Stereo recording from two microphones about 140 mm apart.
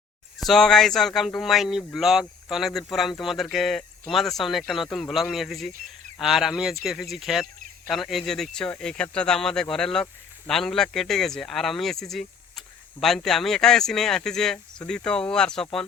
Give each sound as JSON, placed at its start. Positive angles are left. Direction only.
{"t": 0.3, "sound": "speech", "side_deg": 0}